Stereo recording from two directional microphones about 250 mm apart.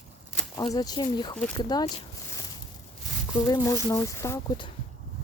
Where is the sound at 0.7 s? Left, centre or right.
Centre.